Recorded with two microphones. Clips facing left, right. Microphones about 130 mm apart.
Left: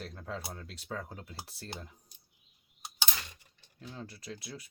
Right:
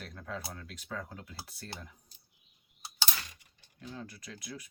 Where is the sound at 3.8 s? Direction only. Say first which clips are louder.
Right 1 dB; 30° left (ahead or behind).